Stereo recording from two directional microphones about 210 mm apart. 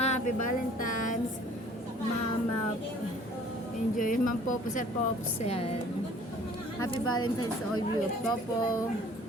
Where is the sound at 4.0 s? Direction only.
40° left (ahead or behind).